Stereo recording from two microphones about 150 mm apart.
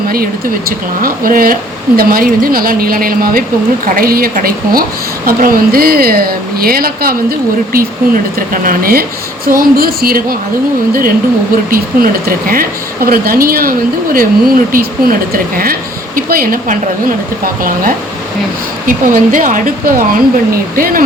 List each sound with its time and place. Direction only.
1.0 s a woman's voice: 75° right (ahead or behind)
11.7 s a woman's voice: 70° right (ahead or behind)